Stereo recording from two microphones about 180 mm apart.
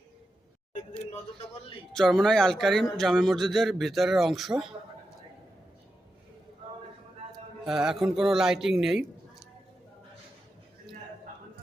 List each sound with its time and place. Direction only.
0.7 s a sound: 35° left (ahead or behind)
2.0 s a man's voice: centre (ahead or behind)
7.6 s a man's voice: centre (ahead or behind)